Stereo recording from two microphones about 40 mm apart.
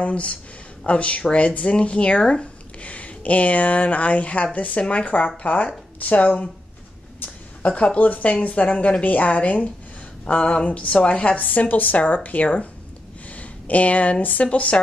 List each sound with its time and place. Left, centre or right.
0.0 s speech: left
2.9 s speech: left
7.6 s speech: left
10.2 s speech: left
13.3 s a sound: left
14.2 s speech: left